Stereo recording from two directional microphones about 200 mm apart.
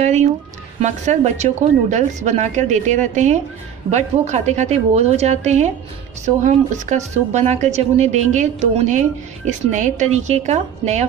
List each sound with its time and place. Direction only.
0.0 s speech: 35° right (ahead or behind)